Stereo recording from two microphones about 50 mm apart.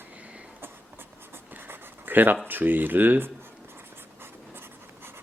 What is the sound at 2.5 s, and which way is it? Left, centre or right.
Speech, right.